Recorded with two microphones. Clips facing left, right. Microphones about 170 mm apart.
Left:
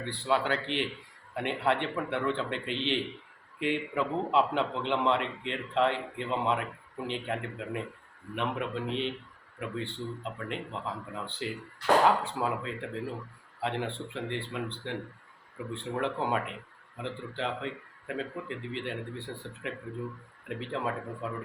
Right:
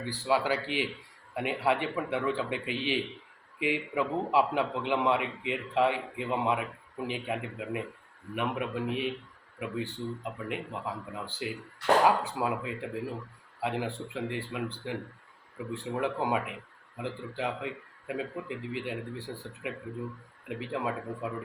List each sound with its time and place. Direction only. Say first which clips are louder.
0.0 s a man's voice: right 1 dB; 5° right (ahead or behind)